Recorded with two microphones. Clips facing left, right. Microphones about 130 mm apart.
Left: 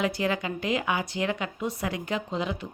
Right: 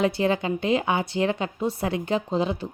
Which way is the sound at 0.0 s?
30° right (ahead or behind).